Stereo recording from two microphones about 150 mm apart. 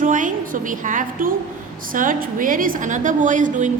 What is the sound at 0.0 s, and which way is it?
A woman's voice, 60° right (ahead or behind).